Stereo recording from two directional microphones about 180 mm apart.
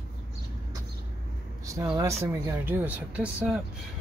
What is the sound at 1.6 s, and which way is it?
Speech, 20° right (ahead or behind).